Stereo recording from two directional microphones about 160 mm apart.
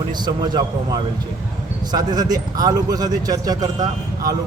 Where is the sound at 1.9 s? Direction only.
25° right (ahead or behind).